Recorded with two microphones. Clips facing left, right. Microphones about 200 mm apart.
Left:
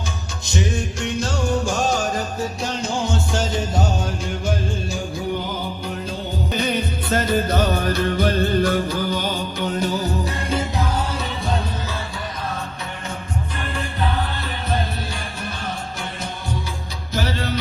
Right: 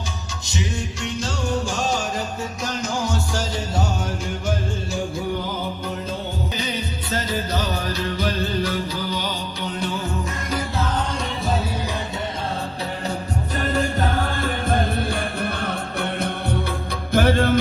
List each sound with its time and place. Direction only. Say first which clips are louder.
0.4 s music: left 4 dB; 50° left (ahead or behind)
2.6 s music: right 1 dB; 30° left (ahead or behind)
6.5 s music: left 5 dB; 55° left (ahead or behind)
10.5 s music: left 1 dB; 25° left (ahead or behind)
13.6 s music: right 6 dB; 40° right (ahead or behind)